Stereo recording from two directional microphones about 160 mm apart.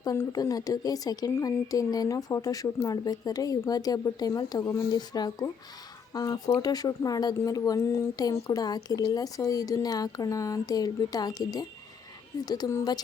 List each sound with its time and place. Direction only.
0.0 s speech: 20° left (ahead or behind)